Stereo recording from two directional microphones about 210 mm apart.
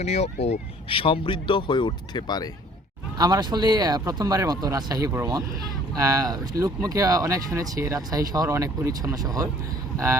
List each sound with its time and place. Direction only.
0.0 s speech: 30° left (ahead or behind)
3.2 s speech: 20° right (ahead or behind)